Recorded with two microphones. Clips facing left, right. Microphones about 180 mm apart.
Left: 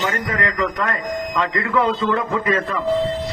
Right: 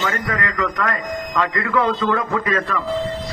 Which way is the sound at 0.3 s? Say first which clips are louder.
Left 1 dB; 25° left (ahead or behind).